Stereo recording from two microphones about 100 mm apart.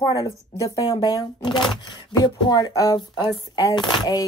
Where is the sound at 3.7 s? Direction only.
50° left (ahead or behind).